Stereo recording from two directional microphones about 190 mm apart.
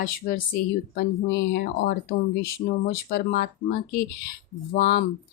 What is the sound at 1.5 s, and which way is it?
Speech, 55° left (ahead or behind).